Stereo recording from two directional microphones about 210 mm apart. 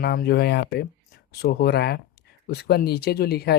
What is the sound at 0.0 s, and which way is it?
Speech, 50° left (ahead or behind).